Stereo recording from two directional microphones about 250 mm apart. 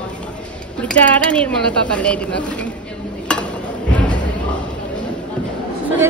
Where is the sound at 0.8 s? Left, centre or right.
Centre.